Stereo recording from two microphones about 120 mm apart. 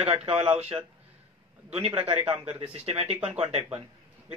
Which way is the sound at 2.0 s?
50° right (ahead or behind).